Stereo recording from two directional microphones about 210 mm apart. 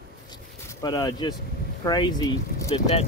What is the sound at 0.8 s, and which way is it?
Speech, 20° left (ahead or behind).